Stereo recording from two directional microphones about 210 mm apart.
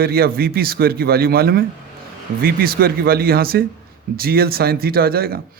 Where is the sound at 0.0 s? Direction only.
45° right (ahead or behind).